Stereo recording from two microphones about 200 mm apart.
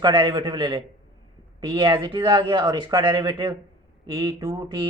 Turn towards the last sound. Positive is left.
turn(degrees=-25)  # may be behind; listen again after turning